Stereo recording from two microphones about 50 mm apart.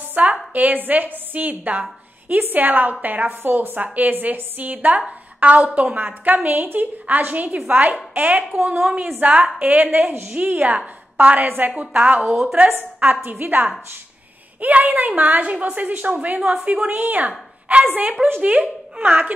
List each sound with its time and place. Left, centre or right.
0.1 s a sound: right
0.5 s a woman's voice: right
10.2 s a woman's voice: right
11.1 s a woman's voice: right
13.0 s a woman's voice: right
17.0 s a woman's voice: right